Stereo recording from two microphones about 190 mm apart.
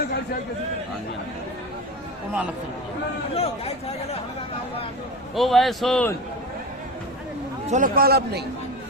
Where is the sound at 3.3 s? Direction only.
30° left (ahead or behind).